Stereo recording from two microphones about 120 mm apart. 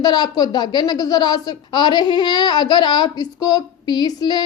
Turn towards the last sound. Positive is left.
turn(degrees=35)  # may be behind; listen again after turning